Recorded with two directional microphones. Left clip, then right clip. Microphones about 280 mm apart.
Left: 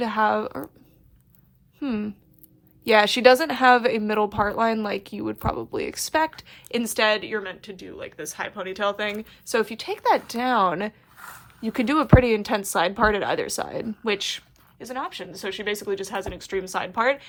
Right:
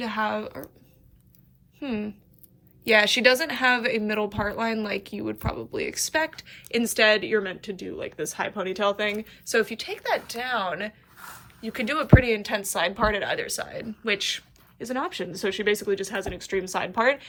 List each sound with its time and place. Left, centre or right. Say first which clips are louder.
0.0 s a woman's voice: left 6 dB; centre
1.8 s a woman's voice: left 2 dB; centre